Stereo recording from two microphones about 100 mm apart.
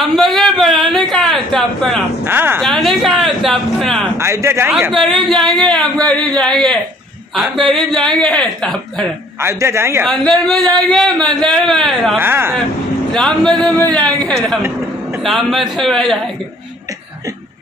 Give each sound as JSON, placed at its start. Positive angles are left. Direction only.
{"t": 0.0, "sound": "speech", "side_deg": 0}
{"t": 2.2, "sound": "speech", "side_deg": -20}
{"t": 2.6, "sound": "speech", "side_deg": 0}
{"t": 4.2, "sound": "speech", "side_deg": -25}
{"t": 4.9, "sound": "speech", "side_deg": 0}
{"t": 9.4, "sound": "speech", "side_deg": -25}
{"t": 10.0, "sound": "speech", "side_deg": 5}
{"t": 12.2, "sound": "speech", "side_deg": -20}
{"t": 13.1, "sound": "a woman's voice", "side_deg": 5}